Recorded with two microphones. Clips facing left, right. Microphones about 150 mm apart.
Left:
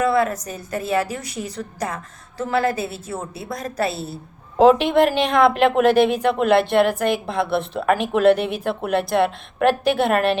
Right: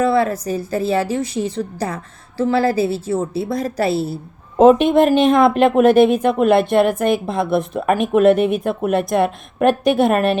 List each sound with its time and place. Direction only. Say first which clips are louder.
0.0 s a woman's voice: right 3 dB; 30° right (ahead or behind)